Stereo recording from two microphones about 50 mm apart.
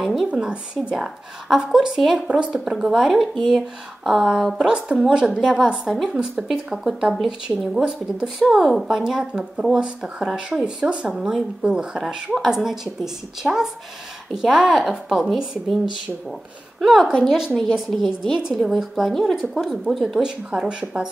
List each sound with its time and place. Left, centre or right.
0.0 s speech: centre
0.3 s speech: centre
10.6 s speech: right; by 20.2 s centre
20.2 s speech: centre